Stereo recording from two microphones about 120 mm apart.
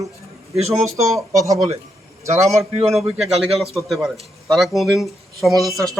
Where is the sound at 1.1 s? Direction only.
25° right (ahead or behind).